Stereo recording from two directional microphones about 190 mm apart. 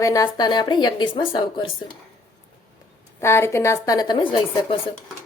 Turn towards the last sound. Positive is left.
turn(degrees=30)  # may be behind; listen again after turning